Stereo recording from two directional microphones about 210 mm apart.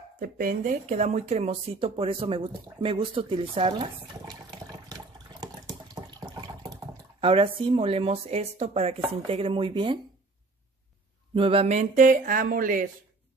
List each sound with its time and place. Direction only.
0.2 s speech: 40° right (ahead or behind)
9.3 s chopping: 25° right (ahead or behind)
11.3 s speech: 25° right (ahead or behind)